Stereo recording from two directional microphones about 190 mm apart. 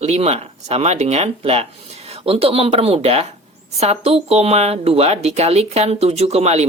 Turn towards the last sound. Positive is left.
turn(degrees=-35)  # may be behind; listen again after turning